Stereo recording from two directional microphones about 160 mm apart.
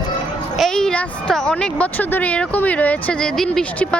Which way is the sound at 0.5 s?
Centre (ahead or behind).